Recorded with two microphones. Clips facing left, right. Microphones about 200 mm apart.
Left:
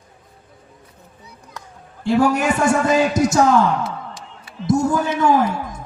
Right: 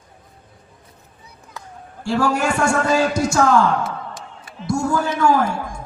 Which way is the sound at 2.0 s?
20° left (ahead or behind).